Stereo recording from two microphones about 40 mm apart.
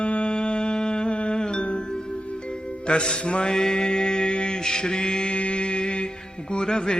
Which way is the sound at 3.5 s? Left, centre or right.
Centre.